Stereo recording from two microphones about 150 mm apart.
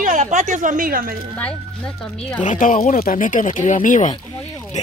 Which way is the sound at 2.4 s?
60° left (ahead or behind).